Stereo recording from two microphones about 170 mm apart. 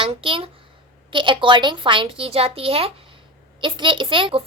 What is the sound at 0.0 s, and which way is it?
A child's voice, 30° right (ahead or behind).